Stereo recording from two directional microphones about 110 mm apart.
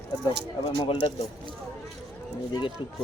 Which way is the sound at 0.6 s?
55° left (ahead or behind).